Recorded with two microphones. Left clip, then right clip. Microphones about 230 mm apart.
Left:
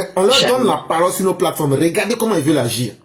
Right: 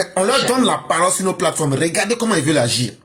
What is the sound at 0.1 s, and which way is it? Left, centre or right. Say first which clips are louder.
Speech: left 6 dB; right.